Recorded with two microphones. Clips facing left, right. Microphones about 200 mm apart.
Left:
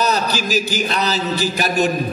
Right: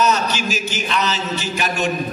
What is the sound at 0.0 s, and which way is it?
A man's voice, 35° left (ahead or behind).